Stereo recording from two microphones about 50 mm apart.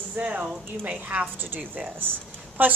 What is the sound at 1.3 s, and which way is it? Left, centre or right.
Speech, right.